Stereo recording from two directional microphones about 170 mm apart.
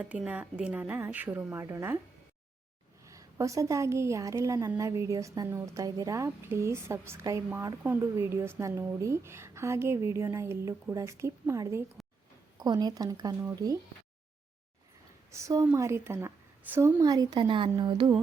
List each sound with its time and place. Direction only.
0.0 s a woman's voice: 10° right (ahead or behind)
3.1 s a woman's voice: 20° right (ahead or behind)
15.3 s a woman's voice: 20° right (ahead or behind)